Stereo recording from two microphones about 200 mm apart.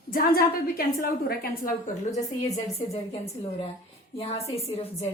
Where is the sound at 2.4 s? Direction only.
30° left (ahead or behind).